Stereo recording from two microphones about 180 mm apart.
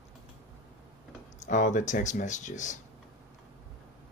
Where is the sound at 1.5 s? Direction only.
45° left (ahead or behind).